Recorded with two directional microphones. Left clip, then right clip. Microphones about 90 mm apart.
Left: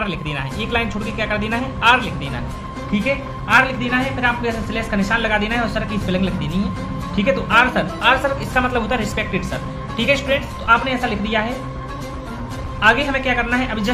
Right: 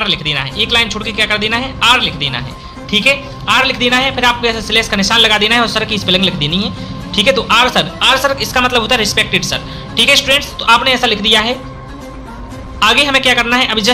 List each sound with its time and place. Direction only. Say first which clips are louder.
0.0 s a man's voice: right 9 dB; 15° right (ahead or behind)
2.9 s a man's voice: right 10 dB; 50° right (ahead or behind); by 7.9 s 65° right (ahead or behind)
7.9 s speech: right 3 dB; 45° right (ahead or behind)
8.2 s speech: right 6 dB; 30° right (ahead or behind)
10.6 s a man's voice: right 6 dB; 85° right
12.8 s a man's voice: right 6 dB; 80° right